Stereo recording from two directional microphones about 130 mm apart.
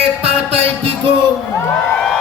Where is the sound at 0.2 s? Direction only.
50° right (ahead or behind).